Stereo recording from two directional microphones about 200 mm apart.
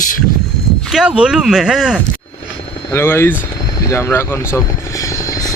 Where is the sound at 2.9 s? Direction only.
10° left (ahead or behind).